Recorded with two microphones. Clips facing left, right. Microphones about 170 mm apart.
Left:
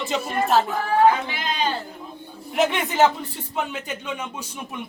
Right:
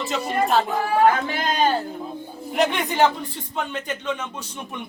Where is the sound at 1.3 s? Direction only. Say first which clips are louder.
Right 4 dB; 45° right (ahead or behind).